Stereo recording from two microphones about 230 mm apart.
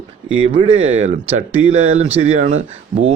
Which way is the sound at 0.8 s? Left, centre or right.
Right.